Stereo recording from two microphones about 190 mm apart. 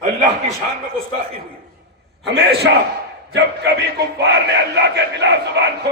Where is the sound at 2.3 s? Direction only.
65° right (ahead or behind).